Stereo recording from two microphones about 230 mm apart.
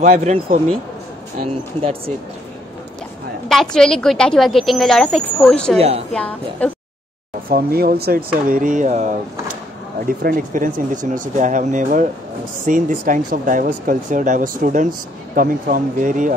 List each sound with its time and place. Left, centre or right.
0.0 s speech: right
3.4 s a woman's voice: centre
5.8 s speech: right
6.1 s a woman's voice: centre
7.4 s speech: right